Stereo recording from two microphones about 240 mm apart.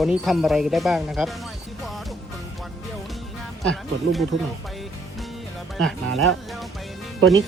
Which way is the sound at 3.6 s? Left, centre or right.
Centre.